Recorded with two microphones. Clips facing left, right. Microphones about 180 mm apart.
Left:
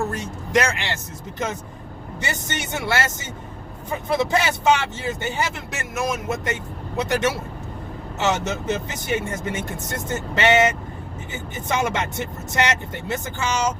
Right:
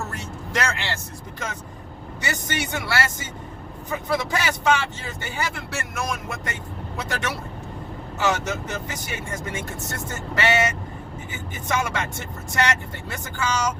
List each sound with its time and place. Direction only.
0.2 s speech: 15° left (ahead or behind)
2.2 s speech: 25° left (ahead or behind)
11.7 s speech: 20° left (ahead or behind)